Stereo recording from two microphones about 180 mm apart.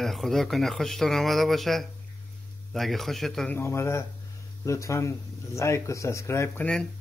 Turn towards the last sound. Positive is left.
turn(degrees=10)  # may be behind; listen again after turning